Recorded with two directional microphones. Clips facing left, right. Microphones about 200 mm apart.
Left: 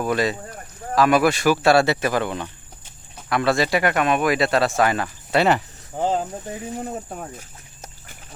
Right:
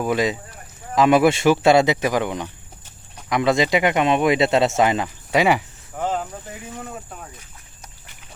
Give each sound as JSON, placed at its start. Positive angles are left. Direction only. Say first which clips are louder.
{"t": 0.0, "sound": "speech", "louder": "right 1 dB", "side_deg": -15}
{"t": 5.9, "sound": "speech", "louder": "left 2 dB", "side_deg": 30}